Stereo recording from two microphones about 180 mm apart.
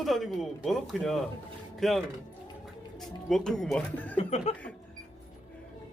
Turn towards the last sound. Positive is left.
turn(degrees=35)  # may be behind; listen again after turning